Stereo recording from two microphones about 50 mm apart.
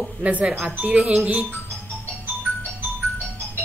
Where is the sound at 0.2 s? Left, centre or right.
Right.